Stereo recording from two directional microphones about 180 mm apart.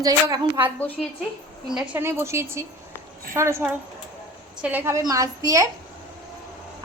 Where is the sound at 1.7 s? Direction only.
10° right (ahead or behind).